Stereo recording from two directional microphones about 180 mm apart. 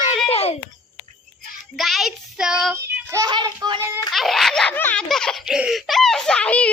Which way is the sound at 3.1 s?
20° right (ahead or behind).